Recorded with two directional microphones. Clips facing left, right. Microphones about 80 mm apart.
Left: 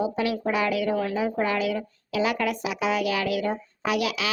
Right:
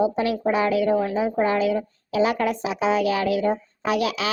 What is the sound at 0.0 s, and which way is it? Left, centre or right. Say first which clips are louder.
A woman's voice: right 4 dB; right.